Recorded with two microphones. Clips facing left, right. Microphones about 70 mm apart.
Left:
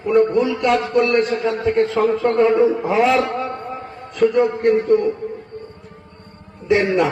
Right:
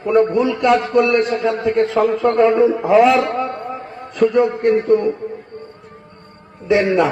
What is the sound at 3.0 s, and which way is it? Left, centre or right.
A man's voice, centre.